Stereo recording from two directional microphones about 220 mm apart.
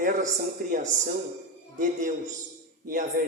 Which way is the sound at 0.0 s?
35° right (ahead or behind).